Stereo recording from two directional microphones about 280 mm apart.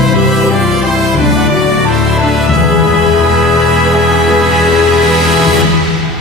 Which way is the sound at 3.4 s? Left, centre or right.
Centre.